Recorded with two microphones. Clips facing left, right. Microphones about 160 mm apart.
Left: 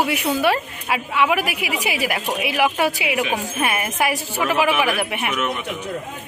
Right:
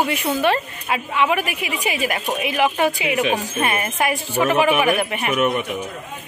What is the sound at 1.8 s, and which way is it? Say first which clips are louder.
Speech: right 2 dB; 10° left (ahead or behind).